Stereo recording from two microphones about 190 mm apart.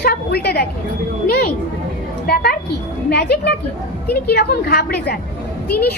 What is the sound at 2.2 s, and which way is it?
A woman's voice, 55° left (ahead or behind).